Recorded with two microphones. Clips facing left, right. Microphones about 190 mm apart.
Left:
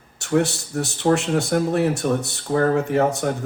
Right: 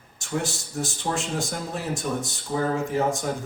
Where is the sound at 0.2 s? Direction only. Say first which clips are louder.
Left 9 dB; 65° left (ahead or behind).